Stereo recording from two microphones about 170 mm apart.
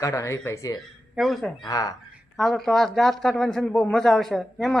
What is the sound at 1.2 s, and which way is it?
Speech, centre (ahead or behind).